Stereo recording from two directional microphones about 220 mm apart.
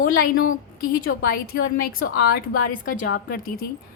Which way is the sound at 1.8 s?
40° left (ahead or behind).